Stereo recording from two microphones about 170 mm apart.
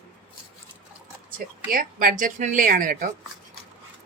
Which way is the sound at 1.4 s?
60° right (ahead or behind).